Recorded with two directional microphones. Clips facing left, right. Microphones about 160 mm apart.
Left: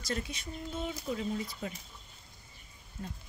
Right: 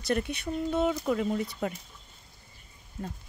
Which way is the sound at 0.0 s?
60° right (ahead or behind).